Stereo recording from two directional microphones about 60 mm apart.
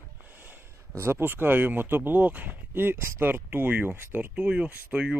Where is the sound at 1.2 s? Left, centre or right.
Right.